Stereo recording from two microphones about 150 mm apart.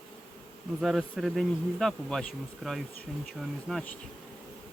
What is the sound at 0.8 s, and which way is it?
Speech, centre (ahead or behind).